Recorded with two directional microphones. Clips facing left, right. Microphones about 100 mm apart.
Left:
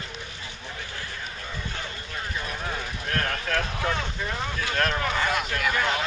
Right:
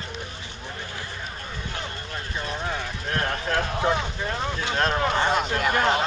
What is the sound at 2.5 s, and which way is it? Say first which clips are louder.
Vehicle: right 3 dB; 25° right (ahead or behind).